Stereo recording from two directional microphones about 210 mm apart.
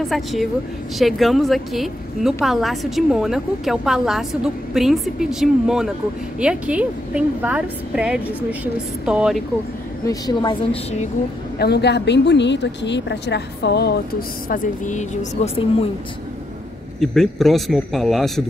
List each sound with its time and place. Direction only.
0.0 s a woman's voice: centre (ahead or behind)
10.0 s a woman's voice: 20° left (ahead or behind)
11.5 s a woman's voice: 50° left (ahead or behind)
14.5 s a woman's voice: 35° left (ahead or behind)
17.0 s a woman's voice: centre (ahead or behind)